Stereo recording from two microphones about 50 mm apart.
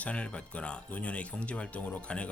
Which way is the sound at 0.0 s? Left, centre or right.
Left.